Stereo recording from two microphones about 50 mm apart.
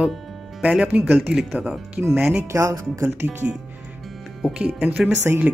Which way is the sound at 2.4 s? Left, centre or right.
Right.